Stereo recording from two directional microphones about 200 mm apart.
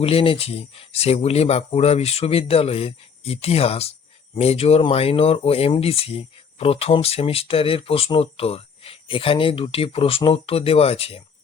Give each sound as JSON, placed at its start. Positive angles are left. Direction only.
{"t": 0.0, "sound": "speech", "side_deg": 30}